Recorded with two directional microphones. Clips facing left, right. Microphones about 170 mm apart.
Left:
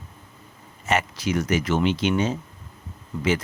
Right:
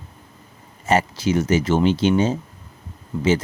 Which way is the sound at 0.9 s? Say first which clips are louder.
Right 5 dB; 30° right (ahead or behind).